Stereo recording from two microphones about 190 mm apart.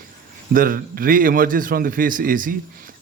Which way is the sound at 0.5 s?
50° right (ahead or behind).